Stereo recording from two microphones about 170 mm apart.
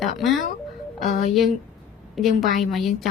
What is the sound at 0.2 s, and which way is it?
Speech, centre (ahead or behind).